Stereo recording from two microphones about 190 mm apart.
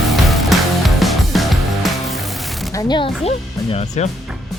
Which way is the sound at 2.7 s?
20° left (ahead or behind).